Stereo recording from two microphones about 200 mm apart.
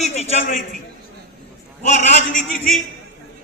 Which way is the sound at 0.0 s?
35° left (ahead or behind).